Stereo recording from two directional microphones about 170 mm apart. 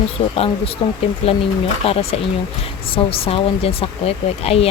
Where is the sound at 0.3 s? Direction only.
35° left (ahead or behind).